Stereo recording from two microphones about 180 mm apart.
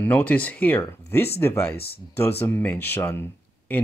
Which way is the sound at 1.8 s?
60° left (ahead or behind).